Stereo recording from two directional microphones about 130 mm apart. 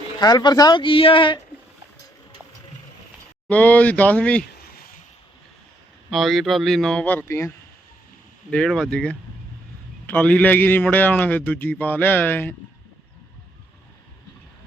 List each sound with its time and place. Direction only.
0.2 s speech: 30° left (ahead or behind)
3.5 s a man's voice: 10° left (ahead or behind)
6.1 s speech: centre (ahead or behind); by 7.5 s 20° left (ahead or behind)
8.4 s a man's voice: 5° left (ahead or behind)